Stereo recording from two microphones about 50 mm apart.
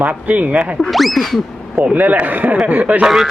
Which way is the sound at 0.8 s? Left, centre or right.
Centre.